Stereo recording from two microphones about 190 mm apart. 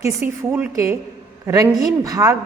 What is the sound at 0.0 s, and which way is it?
A woman's voice, 10° right (ahead or behind).